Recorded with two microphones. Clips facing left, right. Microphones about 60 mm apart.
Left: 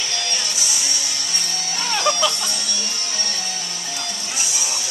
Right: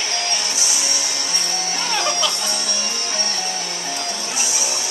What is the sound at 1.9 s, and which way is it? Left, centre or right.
Music, right.